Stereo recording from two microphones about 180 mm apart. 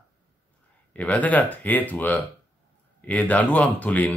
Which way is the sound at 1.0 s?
10° left (ahead or behind).